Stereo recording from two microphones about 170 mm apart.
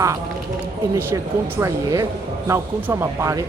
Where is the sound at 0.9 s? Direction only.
15° right (ahead or behind).